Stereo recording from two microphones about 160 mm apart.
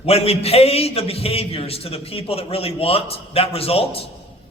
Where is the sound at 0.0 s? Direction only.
40° left (ahead or behind).